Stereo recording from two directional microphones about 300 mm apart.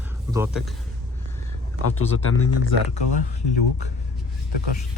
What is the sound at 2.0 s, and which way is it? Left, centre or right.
Speech, left.